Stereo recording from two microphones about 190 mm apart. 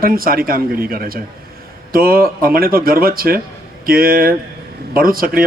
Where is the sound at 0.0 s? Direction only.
50° right (ahead or behind).